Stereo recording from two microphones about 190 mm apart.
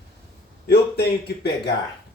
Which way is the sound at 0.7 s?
55° left (ahead or behind).